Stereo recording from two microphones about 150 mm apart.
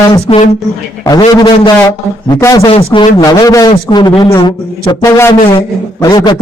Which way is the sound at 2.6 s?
35° left (ahead or behind).